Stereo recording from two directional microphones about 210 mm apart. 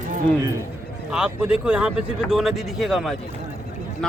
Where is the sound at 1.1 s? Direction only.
5° right (ahead or behind).